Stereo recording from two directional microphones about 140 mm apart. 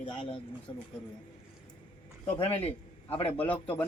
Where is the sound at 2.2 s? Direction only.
40° left (ahead or behind).